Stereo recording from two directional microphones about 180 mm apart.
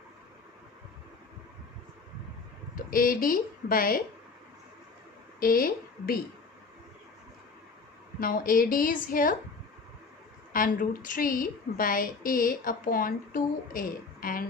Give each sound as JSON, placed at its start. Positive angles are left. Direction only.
{"t": 2.7, "sound": "speech", "side_deg": 50}
{"t": 5.4, "sound": "a woman's voice", "side_deg": 55}
{"t": 8.2, "sound": "a woman's voice", "side_deg": 50}
{"t": 10.5, "sound": "a woman's voice", "side_deg": 50}